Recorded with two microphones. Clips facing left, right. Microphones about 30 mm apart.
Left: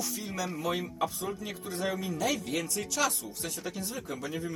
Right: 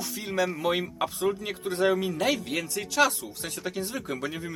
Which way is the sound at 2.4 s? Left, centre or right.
Centre.